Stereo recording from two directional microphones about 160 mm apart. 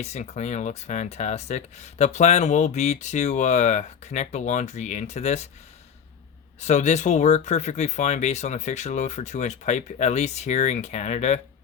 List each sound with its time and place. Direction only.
0.0 s speech: 45° left (ahead or behind)
6.6 s speech: 45° left (ahead or behind)